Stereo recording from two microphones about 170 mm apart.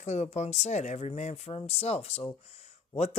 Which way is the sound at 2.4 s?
40° left (ahead or behind).